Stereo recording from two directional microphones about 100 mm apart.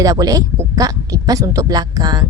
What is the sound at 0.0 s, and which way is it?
Speech, 35° right (ahead or behind).